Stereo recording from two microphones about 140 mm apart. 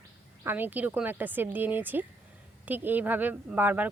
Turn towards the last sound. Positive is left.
turn(degrees=-10)  # may be behind; listen again after turning